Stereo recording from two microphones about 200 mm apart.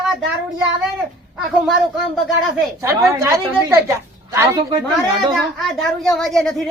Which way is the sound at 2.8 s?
15° right (ahead or behind).